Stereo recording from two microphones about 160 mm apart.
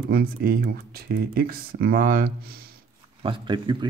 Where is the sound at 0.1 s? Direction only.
70° right (ahead or behind).